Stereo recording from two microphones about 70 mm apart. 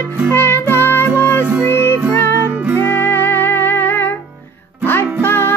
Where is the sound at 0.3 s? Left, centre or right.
Left.